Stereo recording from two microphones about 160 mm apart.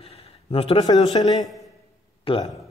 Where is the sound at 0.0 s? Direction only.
35° left (ahead or behind).